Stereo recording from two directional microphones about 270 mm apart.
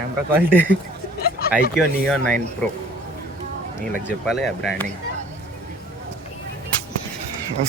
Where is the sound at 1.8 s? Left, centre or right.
Centre.